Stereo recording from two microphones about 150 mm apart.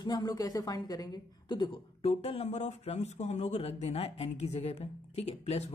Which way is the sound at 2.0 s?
45° left (ahead or behind).